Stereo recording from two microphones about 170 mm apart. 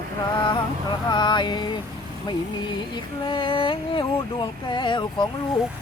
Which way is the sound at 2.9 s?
30° left (ahead or behind).